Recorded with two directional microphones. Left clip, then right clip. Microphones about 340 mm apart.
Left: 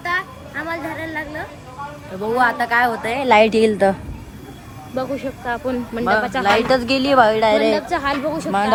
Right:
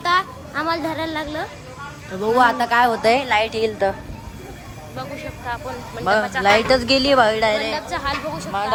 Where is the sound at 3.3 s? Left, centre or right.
Centre.